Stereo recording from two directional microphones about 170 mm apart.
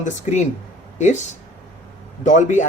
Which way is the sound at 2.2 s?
45° left (ahead or behind).